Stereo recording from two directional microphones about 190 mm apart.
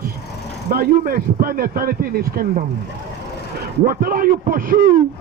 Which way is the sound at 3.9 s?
50° right (ahead or behind).